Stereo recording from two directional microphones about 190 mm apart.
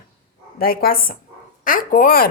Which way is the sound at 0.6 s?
50° left (ahead or behind).